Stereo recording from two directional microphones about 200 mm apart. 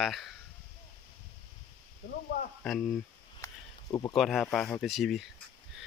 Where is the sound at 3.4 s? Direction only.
20° left (ahead or behind).